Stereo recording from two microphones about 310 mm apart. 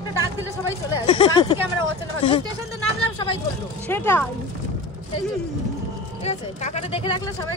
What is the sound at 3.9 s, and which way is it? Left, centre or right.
Speech, centre.